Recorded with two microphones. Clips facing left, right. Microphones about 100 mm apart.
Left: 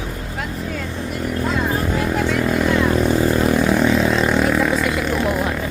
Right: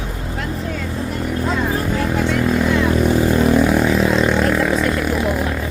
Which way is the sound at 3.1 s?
10° right (ahead or behind).